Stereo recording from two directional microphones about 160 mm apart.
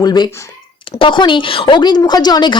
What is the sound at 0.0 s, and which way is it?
Speech, 25° left (ahead or behind).